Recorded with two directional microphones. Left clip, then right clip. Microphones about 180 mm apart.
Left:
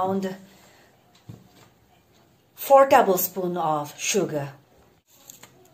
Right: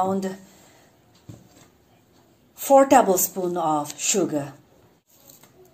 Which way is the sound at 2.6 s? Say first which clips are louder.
Even; 40° right (ahead or behind).